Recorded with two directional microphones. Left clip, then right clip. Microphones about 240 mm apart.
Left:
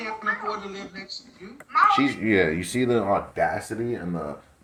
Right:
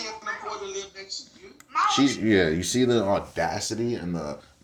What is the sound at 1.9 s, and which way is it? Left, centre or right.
Speech, right.